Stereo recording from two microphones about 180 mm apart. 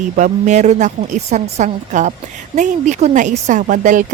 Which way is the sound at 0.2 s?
40° right (ahead or behind).